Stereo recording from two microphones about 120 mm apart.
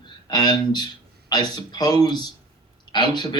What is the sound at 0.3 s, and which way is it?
A man's voice, 35° left (ahead or behind).